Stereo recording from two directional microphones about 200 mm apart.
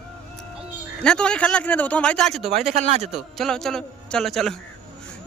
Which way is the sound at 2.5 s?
35° right (ahead or behind).